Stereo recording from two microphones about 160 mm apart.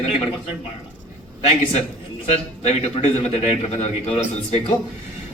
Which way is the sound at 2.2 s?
45° left (ahead or behind).